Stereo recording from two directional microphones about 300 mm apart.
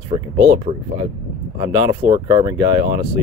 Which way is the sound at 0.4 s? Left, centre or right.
Right.